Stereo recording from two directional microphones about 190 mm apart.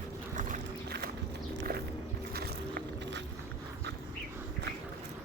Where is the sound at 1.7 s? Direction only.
50° right (ahead or behind).